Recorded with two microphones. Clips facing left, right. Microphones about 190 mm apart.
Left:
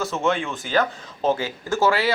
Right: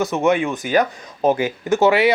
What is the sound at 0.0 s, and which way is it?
Speech, 15° right (ahead or behind).